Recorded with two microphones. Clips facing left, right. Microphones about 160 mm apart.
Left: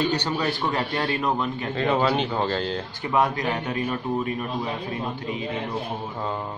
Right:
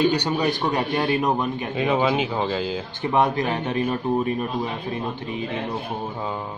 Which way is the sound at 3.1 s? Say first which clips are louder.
Right 2 dB; 25° right (ahead or behind).